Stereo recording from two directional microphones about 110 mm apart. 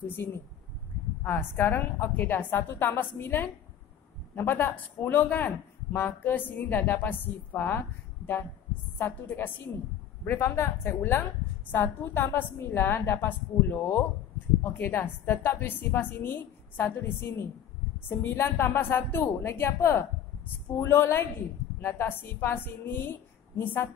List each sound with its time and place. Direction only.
0.1 s a woman's voice: 20° left (ahead or behind)
8.9 s a woman's voice: 20° left (ahead or behind)